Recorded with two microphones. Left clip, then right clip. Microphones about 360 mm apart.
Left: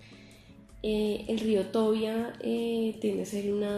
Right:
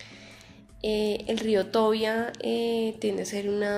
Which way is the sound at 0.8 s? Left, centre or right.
Right.